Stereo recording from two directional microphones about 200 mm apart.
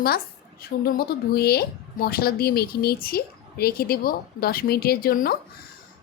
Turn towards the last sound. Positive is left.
turn(degrees=45)  # may be behind; listen again after turning